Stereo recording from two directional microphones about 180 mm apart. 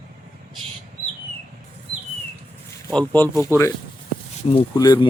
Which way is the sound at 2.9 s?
5° left (ahead or behind).